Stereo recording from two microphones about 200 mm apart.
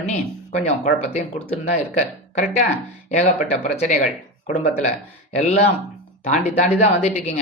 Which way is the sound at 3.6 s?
40° left (ahead or behind).